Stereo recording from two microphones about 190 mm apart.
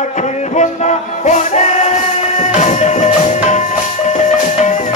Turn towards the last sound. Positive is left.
turn(degrees=40)  # may be behind; listen again after turning